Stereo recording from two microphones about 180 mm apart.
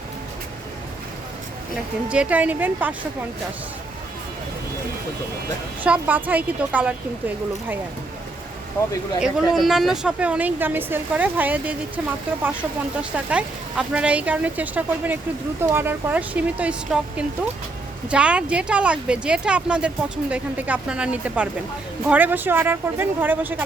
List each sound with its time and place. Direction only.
2.0 s a woman's voice: 5° right (ahead or behind)
5.8 s a woman's voice: 10° right (ahead or behind)
9.2 s a woman's voice: centre (ahead or behind)